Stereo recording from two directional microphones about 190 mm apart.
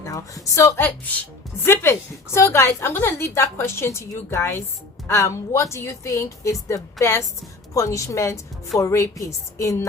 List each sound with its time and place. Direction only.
0.0 s a woman's voice: 15° left (ahead or behind)